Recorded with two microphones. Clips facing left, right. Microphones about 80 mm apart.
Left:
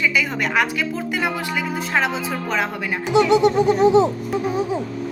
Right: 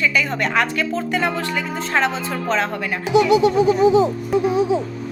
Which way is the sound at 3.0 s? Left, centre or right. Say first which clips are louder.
Right 1 dB; centre.